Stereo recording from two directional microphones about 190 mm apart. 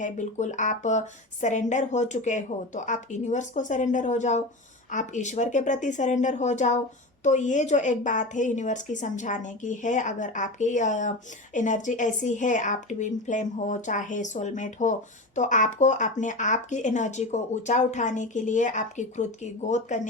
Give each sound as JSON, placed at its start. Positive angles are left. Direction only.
{"t": 0.0, "sound": "speech", "side_deg": 40}